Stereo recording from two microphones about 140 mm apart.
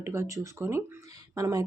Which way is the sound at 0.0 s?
20° right (ahead or behind).